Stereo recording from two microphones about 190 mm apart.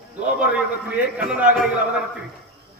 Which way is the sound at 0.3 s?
5° right (ahead or behind).